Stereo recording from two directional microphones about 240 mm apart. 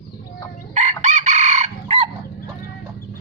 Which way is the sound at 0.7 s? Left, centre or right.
Right.